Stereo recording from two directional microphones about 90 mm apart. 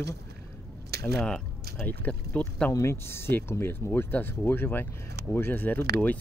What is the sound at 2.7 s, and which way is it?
Speech, 30° left (ahead or behind).